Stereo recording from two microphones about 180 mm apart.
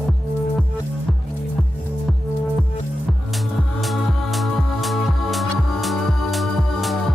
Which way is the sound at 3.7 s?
Centre (ahead or behind).